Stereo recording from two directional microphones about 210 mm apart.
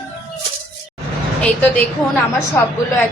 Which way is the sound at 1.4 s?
5° left (ahead or behind).